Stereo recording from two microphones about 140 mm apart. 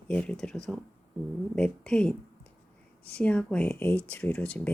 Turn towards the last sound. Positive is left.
turn(degrees=10)  # may be behind; listen again after turning